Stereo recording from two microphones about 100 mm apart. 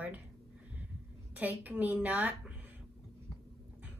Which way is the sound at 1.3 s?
15° right (ahead or behind).